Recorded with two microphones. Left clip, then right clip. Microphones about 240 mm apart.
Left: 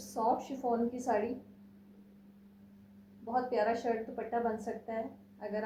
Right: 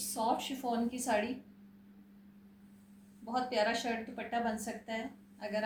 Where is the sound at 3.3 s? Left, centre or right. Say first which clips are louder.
Left 1 dB; right.